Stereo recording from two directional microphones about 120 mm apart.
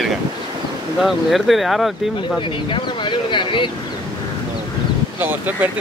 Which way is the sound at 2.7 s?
40° left (ahead or behind).